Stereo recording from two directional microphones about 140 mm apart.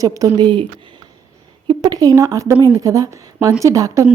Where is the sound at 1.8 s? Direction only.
25° right (ahead or behind).